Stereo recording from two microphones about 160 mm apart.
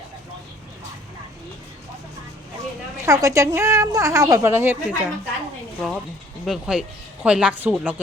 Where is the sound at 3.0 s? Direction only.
20° right (ahead or behind).